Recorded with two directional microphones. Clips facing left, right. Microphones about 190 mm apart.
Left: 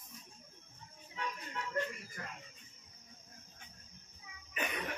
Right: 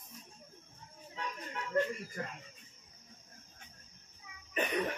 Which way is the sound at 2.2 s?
35° right (ahead or behind).